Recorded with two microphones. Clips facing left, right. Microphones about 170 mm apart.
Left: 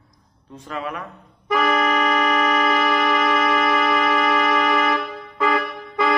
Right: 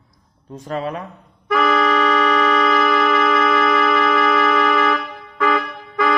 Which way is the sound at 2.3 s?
10° left (ahead or behind).